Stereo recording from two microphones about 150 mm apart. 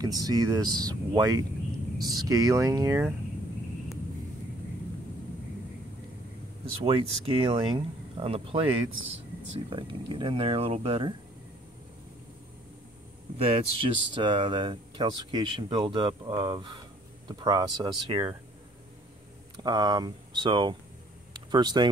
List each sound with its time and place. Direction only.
0.0 s speech: 25° right (ahead or behind)
6.8 s speech: 35° right (ahead or behind)
13.4 s speech: 40° right (ahead or behind)
19.6 s speech: 25° right (ahead or behind)